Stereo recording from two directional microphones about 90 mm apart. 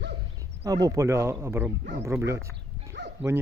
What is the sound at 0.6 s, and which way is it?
Speech, 45° right (ahead or behind).